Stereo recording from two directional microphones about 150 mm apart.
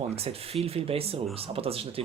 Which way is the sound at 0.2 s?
40° right (ahead or behind).